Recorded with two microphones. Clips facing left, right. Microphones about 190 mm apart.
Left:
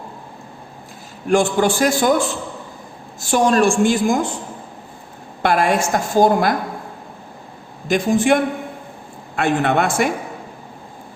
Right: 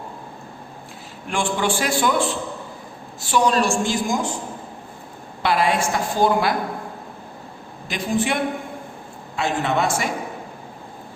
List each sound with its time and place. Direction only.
1.3 s a woman's voice: 45° left (ahead or behind)
5.4 s a woman's voice: 50° left (ahead or behind)
7.9 s a woman's voice: 45° left (ahead or behind)
9.3 s a man's voice: 55° left (ahead or behind)